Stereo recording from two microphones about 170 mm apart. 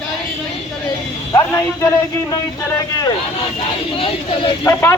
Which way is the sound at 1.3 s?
20° left (ahead or behind).